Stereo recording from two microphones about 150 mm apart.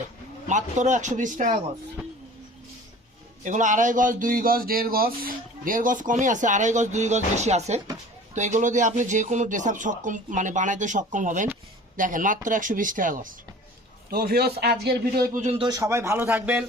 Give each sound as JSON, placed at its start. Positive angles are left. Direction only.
{"t": 0.4, "sound": "speech", "side_deg": -55}
{"t": 3.4, "sound": "speech", "side_deg": -55}
{"t": 14.1, "sound": "a man's voice", "side_deg": -90}
{"t": 15.4, "sound": "speech", "side_deg": -45}
{"t": 15.6, "sound": "a man's voice", "side_deg": -25}